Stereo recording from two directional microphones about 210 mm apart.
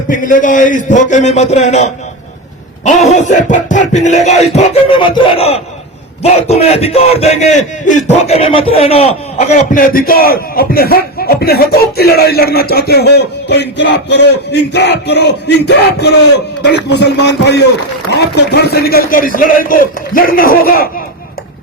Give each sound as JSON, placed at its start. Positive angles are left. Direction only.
{"t": 0.1, "sound": "a man's voice", "side_deg": 40}
{"t": 9.7, "sound": "a man's voice", "side_deg": 40}